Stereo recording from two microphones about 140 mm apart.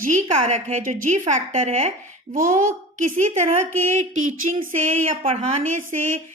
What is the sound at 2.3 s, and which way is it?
Speech, 75° right (ahead or behind).